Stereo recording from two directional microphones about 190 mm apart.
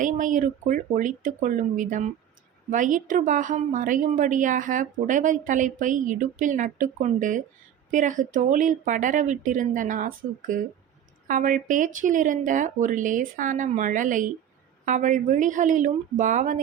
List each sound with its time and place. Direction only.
0.0 s a woman's voice: 40° right (ahead or behind)